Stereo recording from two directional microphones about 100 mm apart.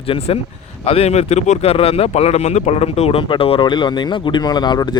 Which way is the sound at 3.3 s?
60° left (ahead or behind).